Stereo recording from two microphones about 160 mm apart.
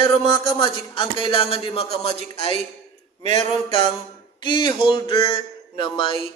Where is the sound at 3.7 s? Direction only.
45° right (ahead or behind).